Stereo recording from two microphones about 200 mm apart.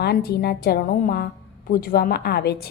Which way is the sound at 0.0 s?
55° left (ahead or behind).